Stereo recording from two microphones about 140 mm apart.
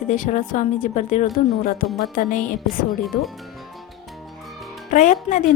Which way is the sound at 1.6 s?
90° left.